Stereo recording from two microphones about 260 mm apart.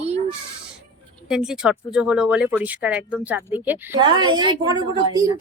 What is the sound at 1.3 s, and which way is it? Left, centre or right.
A woman's voice, centre.